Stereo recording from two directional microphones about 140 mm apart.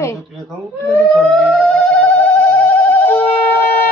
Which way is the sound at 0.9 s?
Centre (ahead or behind).